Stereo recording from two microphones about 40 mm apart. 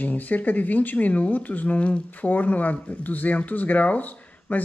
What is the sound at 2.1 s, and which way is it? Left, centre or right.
Speech, left.